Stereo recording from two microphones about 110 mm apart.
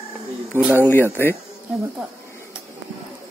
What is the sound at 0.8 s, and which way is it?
Speech, 20° left (ahead or behind).